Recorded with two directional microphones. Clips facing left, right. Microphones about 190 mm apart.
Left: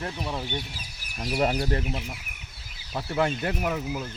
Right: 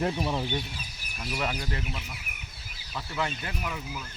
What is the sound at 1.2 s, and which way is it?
Speech, 35° left (ahead or behind).